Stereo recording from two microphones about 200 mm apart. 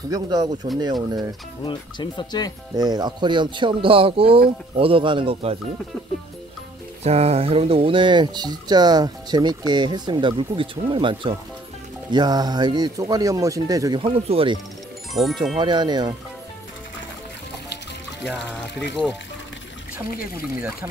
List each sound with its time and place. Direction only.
0.1 s speech: 20° right (ahead or behind)
1.6 s speech: 25° left (ahead or behind)
2.7 s speech: 20° right (ahead or behind)
7.0 s speech: 30° right (ahead or behind)
15.1 s speech: centre (ahead or behind)
15.5 s speech: 20° right (ahead or behind)
18.2 s speech: centre (ahead or behind)